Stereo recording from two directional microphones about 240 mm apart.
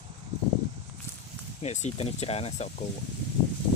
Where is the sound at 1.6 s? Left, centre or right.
Left.